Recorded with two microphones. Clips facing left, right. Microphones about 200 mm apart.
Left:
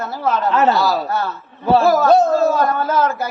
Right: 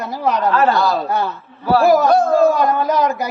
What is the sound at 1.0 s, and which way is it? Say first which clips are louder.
Speech: right 2 dB; 15° right (ahead or behind).